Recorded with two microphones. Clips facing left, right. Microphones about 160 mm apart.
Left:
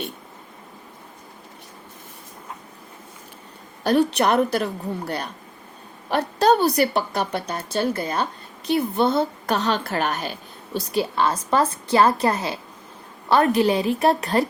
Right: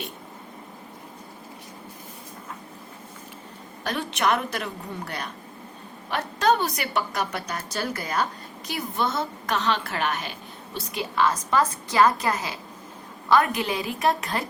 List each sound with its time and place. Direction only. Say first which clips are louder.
3.8 s a woman's voice: left 7 dB; 35° left (ahead or behind)